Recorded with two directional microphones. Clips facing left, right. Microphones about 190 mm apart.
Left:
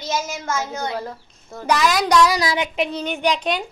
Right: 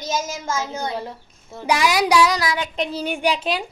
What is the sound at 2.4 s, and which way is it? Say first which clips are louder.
Child singing: left 2 dB; 25° left (ahead or behind).